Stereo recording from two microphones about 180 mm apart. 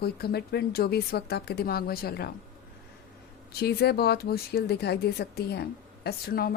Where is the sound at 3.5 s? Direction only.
60° left (ahead or behind).